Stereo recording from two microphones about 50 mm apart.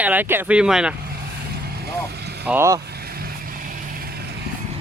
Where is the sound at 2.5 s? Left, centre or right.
Centre.